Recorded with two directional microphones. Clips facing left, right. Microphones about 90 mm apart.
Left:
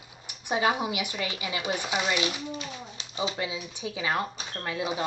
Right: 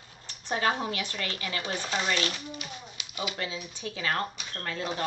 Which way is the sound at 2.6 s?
30° left (ahead or behind).